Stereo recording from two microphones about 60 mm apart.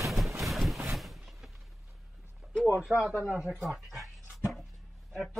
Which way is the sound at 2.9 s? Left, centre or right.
Right.